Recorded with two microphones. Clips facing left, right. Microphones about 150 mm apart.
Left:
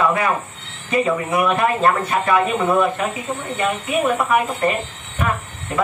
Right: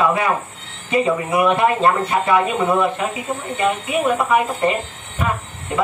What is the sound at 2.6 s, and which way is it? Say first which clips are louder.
Speech: even; centre (ahead or behind).